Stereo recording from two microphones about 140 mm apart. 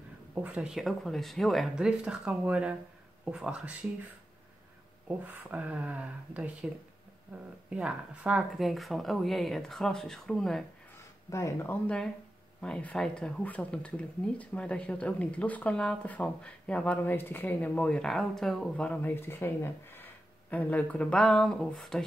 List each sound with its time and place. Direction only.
0.3 s speech: 10° right (ahead or behind)
5.0 s speech: 10° right (ahead or behind)
11.2 s speech: 20° left (ahead or behind); by 22.0 s 5° left (ahead or behind)